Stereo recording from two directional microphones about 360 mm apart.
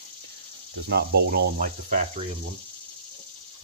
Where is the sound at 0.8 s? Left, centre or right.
Right.